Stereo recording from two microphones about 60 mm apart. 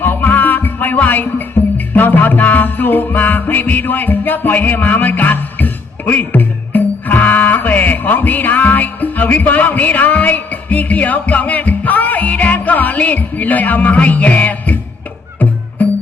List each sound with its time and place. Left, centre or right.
0.0 s music: left